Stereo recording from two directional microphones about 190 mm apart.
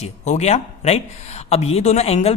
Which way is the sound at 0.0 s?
35° left (ahead or behind).